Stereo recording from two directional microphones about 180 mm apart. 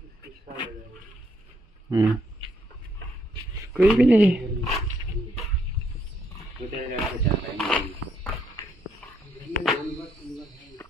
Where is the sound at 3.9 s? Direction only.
5° right (ahead or behind).